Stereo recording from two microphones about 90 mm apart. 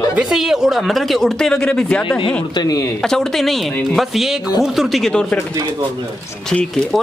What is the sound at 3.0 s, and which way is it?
Speech, 5° left (ahead or behind).